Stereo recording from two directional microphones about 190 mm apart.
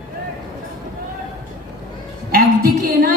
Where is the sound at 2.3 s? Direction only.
55° right (ahead or behind).